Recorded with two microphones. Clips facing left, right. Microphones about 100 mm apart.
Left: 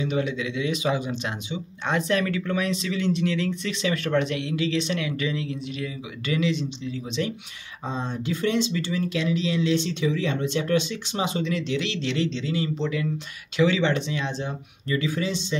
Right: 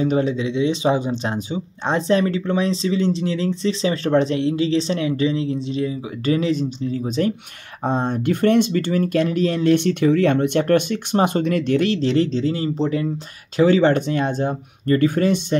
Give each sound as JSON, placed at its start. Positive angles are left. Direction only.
{"t": 0.0, "sound": "speech", "side_deg": -35}
{"t": 7.8, "sound": "speech", "side_deg": -60}